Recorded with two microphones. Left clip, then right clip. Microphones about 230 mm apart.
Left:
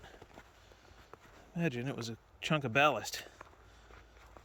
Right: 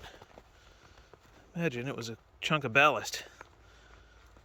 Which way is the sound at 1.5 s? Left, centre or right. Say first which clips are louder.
Right 3 dB; centre.